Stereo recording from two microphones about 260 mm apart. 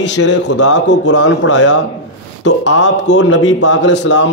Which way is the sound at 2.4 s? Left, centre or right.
Left.